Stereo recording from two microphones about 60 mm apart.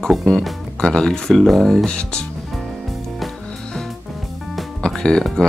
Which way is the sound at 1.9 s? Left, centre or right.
Centre.